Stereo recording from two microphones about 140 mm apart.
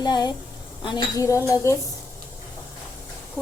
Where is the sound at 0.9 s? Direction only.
25° left (ahead or behind).